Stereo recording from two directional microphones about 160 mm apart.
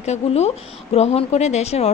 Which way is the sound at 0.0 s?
45° left (ahead or behind).